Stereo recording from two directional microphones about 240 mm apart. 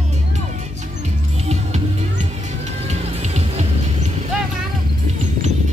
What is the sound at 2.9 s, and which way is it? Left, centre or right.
Music, right.